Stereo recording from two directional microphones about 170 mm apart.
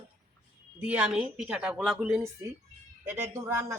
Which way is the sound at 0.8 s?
5° right (ahead or behind).